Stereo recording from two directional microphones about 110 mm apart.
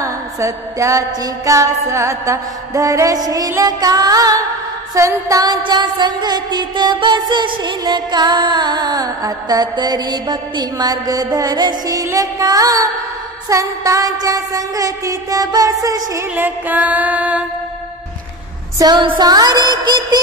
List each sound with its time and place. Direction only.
0.0 s music: 30° right (ahead or behind)
16.3 s music: 15° right (ahead or behind)
18.8 s music: 40° right (ahead or behind)